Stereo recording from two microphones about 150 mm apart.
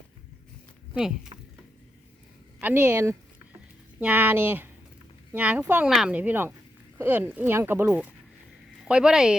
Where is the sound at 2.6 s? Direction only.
10° right (ahead or behind).